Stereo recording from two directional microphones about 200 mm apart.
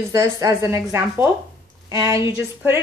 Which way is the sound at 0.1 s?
15° right (ahead or behind).